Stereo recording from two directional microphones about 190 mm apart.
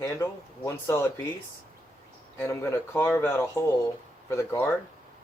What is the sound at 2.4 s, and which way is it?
Speech, 15° left (ahead or behind).